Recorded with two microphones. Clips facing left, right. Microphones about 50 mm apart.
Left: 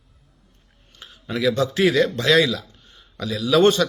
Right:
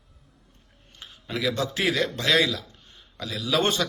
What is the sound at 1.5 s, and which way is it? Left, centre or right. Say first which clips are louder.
Speech: left 8 dB; right.